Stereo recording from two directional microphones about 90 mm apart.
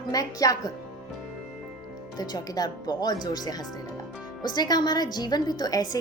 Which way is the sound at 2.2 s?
45° left (ahead or behind).